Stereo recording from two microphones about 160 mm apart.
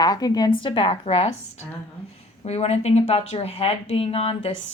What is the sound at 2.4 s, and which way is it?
A woman's voice, 40° left (ahead or behind).